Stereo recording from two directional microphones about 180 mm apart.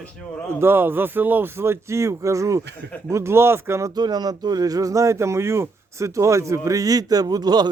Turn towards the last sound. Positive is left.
turn(degrees=-20)  # may be behind; listen again after turning